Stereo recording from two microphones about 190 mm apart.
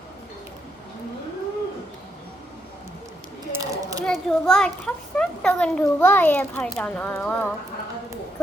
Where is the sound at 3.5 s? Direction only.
15° right (ahead or behind).